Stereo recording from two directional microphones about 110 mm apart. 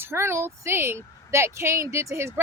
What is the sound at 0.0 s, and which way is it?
Speech, 20° right (ahead or behind).